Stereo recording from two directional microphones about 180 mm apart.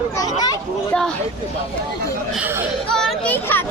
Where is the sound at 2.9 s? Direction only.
5° left (ahead or behind).